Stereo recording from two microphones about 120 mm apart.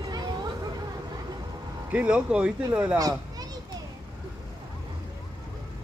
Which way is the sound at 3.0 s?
30° right (ahead or behind).